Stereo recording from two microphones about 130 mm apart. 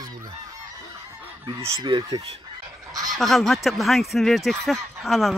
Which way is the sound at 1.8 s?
35° right (ahead or behind).